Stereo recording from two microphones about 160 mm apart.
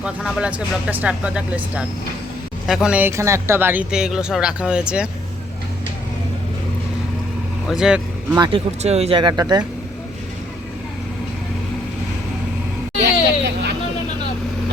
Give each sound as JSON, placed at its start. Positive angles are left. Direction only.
{"t": 0.0, "sound": "speech", "side_deg": -5}
{"t": 7.7, "sound": "speech", "side_deg": -5}
{"t": 8.4, "sound": "speech", "side_deg": -35}
{"t": 13.1, "sound": "a sound", "side_deg": -90}